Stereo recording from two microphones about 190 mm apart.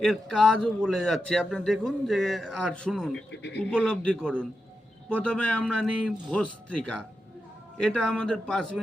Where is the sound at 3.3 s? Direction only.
60° left (ahead or behind).